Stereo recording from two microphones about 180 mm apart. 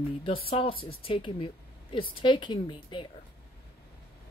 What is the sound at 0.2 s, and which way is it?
Speech, 30° left (ahead or behind).